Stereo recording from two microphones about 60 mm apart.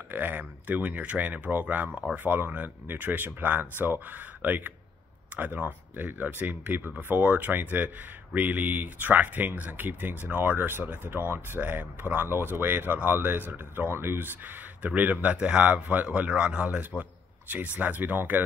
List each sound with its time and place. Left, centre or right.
0.1 s speech: right
14.8 s speech: right